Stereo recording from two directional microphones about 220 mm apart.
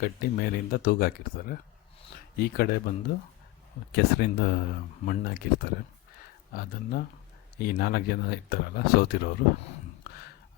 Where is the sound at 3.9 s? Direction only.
45° left (ahead or behind).